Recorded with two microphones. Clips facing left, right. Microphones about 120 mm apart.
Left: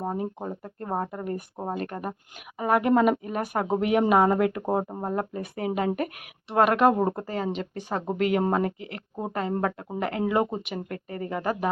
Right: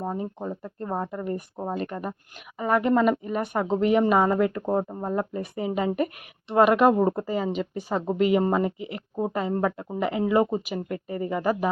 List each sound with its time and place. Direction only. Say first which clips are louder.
0.0 s speech: even; 10° left (ahead or behind)
4.6 s speech: right 1 dB; 15° left (ahead or behind)
5.0 s speech: right 1 dB; centre (ahead or behind)